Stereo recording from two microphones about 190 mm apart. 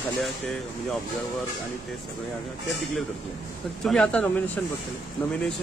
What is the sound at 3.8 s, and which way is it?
Speech, 5° left (ahead or behind).